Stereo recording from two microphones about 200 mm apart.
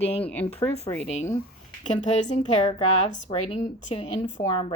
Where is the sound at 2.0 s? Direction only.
35° left (ahead or behind).